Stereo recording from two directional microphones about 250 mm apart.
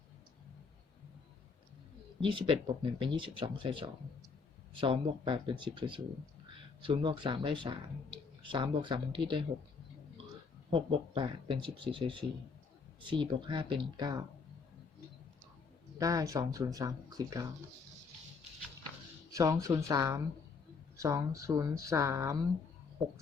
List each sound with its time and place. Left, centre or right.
2.2 s speech: centre
10.7 s speech: right
16.0 s speech: centre
19.3 s speech: centre